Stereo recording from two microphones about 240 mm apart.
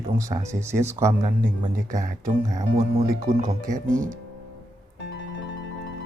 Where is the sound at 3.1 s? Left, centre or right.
Right.